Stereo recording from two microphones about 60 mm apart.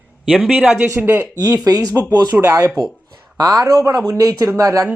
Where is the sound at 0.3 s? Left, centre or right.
Centre.